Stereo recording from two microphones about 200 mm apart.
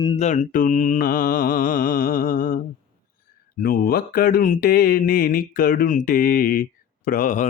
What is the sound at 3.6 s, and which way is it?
Mantra, 50° left (ahead or behind).